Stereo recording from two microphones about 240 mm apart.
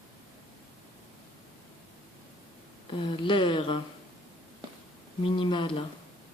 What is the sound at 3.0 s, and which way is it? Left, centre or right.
Speech, left.